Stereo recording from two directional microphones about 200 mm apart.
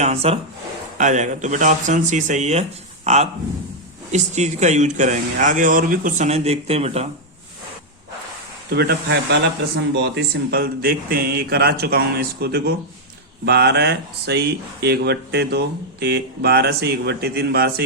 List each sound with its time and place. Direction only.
0.0 s speech: 30° right (ahead or behind)
8.7 s speech: 55° right (ahead or behind)